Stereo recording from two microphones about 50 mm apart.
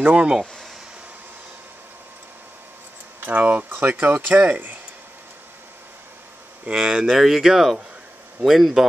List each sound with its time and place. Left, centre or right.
0.0 s speech: right
3.2 s speech: right
6.7 s a man's voice: centre